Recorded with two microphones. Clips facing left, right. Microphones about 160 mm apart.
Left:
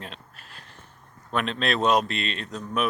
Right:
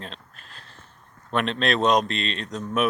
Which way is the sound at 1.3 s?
5° left (ahead or behind).